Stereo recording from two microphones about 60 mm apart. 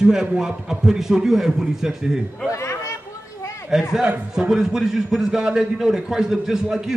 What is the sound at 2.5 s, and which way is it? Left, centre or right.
Chatter, left.